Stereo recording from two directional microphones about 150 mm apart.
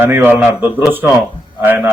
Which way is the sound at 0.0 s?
15° right (ahead or behind).